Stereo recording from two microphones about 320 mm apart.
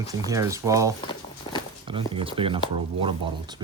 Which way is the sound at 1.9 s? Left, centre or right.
Centre.